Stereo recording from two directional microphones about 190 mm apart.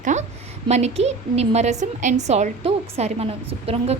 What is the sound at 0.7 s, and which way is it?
A woman's voice, 35° right (ahead or behind).